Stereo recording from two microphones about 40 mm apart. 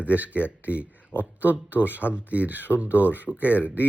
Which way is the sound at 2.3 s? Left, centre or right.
Right.